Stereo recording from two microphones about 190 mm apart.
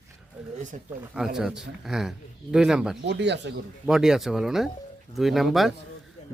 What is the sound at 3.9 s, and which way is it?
Speech, 5° right (ahead or behind).